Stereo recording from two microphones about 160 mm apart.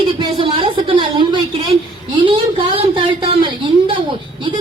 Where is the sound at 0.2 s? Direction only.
30° right (ahead or behind).